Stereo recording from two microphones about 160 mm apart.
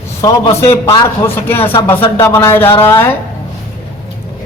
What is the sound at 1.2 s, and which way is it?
Speech, 15° left (ahead or behind).